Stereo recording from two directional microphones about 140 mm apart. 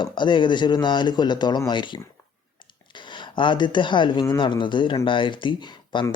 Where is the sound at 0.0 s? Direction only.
35° left (ahead or behind).